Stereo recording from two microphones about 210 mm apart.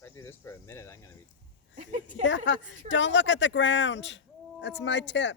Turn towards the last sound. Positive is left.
turn(degrees=55)  # may be behind; listen again after turning